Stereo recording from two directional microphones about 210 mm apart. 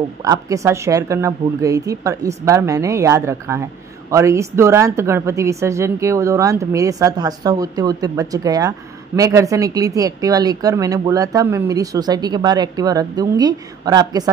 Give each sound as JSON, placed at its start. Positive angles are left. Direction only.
{"t": 0.2, "sound": "a woman's voice", "side_deg": -15}